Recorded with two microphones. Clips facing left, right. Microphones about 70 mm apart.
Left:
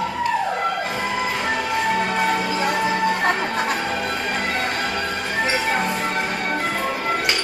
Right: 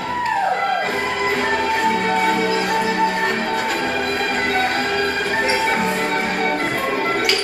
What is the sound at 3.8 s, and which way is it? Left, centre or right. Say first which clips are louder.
Music: right 3 dB; right.